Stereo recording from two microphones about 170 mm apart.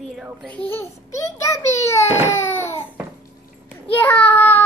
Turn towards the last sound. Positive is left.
turn(degrees=10)  # may be behind; listen again after turning